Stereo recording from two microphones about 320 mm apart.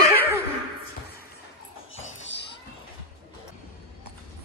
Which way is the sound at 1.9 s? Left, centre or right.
Left.